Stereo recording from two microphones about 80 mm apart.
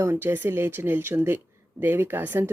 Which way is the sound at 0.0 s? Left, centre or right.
Right.